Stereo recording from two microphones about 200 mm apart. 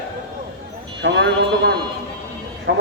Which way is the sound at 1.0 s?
65° right (ahead or behind).